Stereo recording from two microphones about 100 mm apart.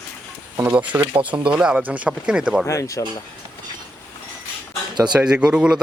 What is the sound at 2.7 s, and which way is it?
Speech, 30° left (ahead or behind).